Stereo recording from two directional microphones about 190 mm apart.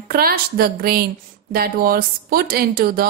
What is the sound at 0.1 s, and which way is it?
A woman's voice, 55° right (ahead or behind).